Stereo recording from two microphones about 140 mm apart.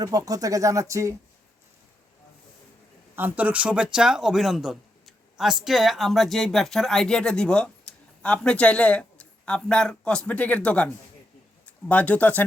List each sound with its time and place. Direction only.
0.0 s speech: 25° right (ahead or behind)
3.2 s speech: 10° right (ahead or behind); by 12.5 s 10° left (ahead or behind)